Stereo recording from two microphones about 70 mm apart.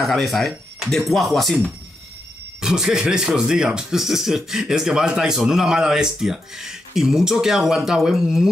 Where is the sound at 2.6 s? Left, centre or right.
Centre.